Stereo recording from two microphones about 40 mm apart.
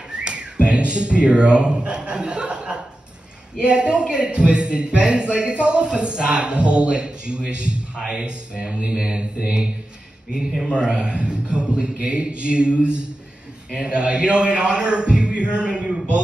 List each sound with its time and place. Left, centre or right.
0.1 s a sound: right
3.5 s a man's voice: right
10.7 s a man's voice: right